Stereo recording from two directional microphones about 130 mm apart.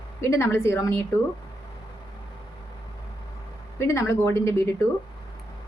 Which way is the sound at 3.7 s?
20° left (ahead or behind).